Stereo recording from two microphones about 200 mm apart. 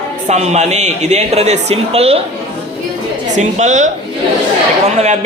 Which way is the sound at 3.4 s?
35° right (ahead or behind).